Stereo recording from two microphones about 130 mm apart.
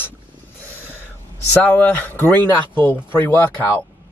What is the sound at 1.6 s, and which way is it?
Speech, 15° left (ahead or behind).